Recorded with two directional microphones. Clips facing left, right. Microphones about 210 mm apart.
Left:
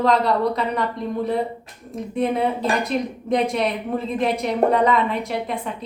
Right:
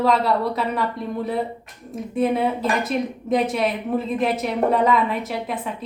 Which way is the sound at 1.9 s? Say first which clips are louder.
Right 1 dB; 5° right (ahead or behind).